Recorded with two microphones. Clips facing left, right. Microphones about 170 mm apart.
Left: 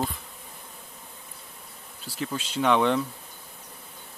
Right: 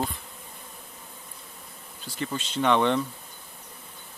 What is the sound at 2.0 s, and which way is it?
Speech, centre (ahead or behind).